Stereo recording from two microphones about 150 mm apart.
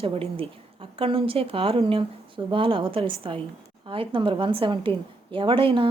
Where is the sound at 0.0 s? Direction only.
35° right (ahead or behind).